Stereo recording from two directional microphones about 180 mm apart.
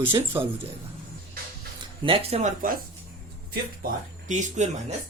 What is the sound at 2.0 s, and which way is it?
Speech, 30° right (ahead or behind).